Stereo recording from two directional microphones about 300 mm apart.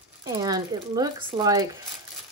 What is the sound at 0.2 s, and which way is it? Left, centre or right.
Speech, centre.